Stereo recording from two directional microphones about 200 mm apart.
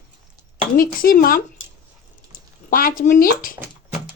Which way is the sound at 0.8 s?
45° left (ahead or behind).